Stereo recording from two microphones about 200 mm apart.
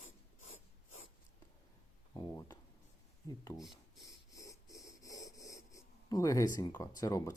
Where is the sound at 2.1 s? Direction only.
20° left (ahead or behind).